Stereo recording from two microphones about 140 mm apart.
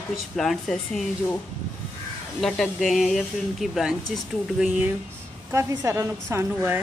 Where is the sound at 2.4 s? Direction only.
Centre (ahead or behind).